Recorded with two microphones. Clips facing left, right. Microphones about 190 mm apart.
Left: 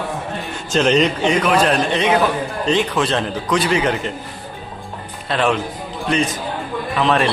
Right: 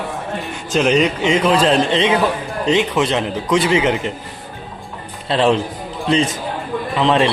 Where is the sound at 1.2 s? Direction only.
25° right (ahead or behind).